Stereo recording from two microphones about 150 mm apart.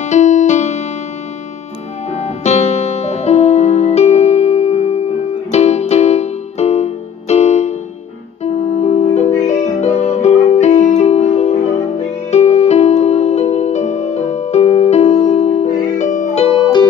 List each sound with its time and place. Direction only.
0.0 s music: 50° left (ahead or behind)
2.1 s music: 45° left (ahead or behind)
8.7 s music: 45° left (ahead or behind)
16.4 s music: 35° left (ahead or behind)